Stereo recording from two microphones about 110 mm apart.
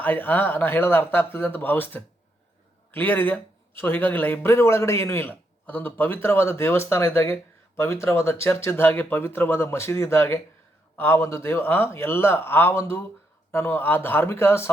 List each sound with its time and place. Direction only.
0.0 s speech: 15° left (ahead or behind)